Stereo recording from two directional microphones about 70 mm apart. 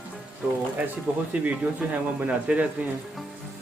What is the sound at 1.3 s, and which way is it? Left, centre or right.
Speech, right.